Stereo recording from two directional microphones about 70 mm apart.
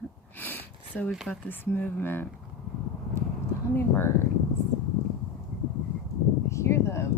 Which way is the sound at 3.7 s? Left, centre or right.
Left.